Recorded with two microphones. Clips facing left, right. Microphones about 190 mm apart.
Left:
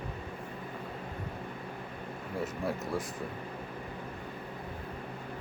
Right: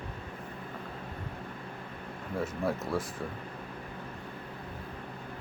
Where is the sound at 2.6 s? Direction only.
15° left (ahead or behind).